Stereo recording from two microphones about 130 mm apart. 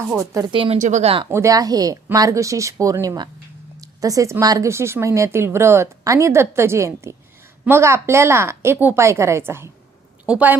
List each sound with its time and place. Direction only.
0.3 s speech: 35° right (ahead or behind)
0.8 s speech: 65° right (ahead or behind)
1.3 s a woman's voice: 20° right (ahead or behind)